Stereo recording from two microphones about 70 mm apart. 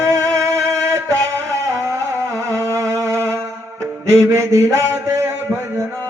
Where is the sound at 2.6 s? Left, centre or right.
Right.